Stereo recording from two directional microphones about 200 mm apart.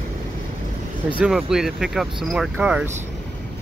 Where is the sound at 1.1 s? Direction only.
5° right (ahead or behind).